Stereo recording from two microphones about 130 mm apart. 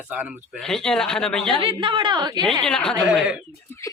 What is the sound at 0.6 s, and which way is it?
Speech, 5° left (ahead or behind).